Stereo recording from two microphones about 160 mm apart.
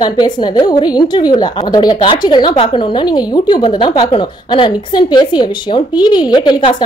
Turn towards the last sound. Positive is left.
turn(degrees=25)  # may be behind; listen again after turning